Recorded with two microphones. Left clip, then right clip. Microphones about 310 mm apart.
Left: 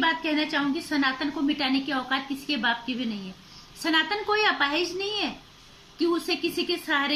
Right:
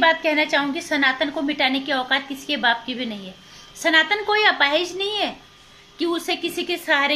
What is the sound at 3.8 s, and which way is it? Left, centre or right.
A woman's voice, centre.